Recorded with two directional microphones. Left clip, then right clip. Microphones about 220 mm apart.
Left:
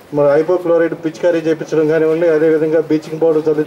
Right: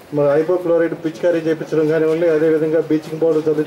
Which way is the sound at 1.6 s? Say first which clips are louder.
Left 3 dB; 20° right (ahead or behind).